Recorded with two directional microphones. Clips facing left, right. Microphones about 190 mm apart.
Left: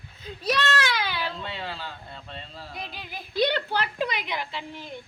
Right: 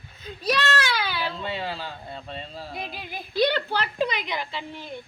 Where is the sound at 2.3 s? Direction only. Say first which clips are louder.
Right 4 dB; 10° right (ahead or behind).